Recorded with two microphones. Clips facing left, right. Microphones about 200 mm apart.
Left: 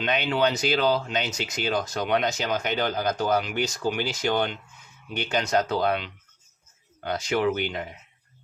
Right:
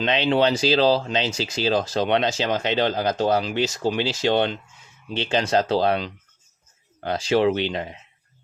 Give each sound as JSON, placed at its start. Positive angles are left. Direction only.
{"t": 0.0, "sound": "speech", "side_deg": -25}